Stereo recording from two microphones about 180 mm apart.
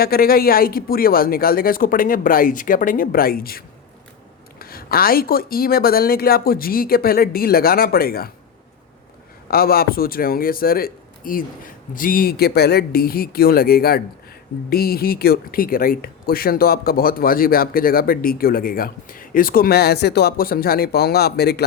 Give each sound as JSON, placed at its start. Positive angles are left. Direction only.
{"t": 0.0, "sound": "speech", "side_deg": 55}
{"t": 4.6, "sound": "speech", "side_deg": 55}
{"t": 9.5, "sound": "speech", "side_deg": 55}